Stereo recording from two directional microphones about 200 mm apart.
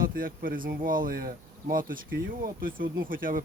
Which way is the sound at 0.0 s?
45° right (ahead or behind).